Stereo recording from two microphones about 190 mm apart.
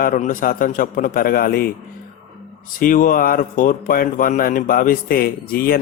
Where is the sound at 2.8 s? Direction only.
45° left (ahead or behind).